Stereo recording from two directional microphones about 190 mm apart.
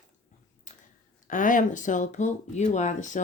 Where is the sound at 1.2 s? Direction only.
45° left (ahead or behind).